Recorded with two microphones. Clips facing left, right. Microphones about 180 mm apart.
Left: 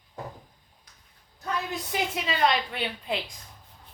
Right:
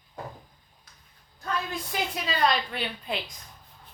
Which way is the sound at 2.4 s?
25° left (ahead or behind).